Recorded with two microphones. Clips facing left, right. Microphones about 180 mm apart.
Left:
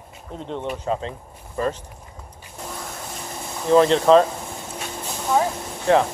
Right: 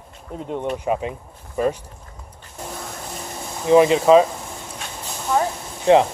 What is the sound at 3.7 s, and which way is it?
Speech, 10° right (ahead or behind).